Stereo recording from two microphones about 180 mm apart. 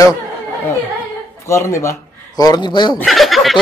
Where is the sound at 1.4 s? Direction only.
15° left (ahead or behind).